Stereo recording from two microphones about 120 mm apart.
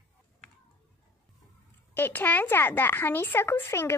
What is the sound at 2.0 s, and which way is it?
Speech, 15° left (ahead or behind).